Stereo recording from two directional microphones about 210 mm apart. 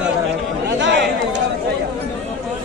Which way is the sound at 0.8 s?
55° right (ahead or behind).